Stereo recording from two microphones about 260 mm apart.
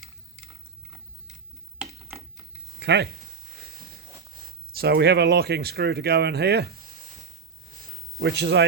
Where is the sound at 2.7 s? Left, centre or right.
Right.